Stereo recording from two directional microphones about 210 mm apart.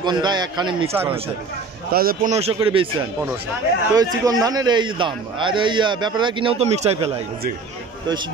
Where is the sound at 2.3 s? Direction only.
30° right (ahead or behind).